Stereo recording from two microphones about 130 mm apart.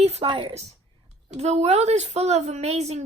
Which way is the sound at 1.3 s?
55° right (ahead or behind).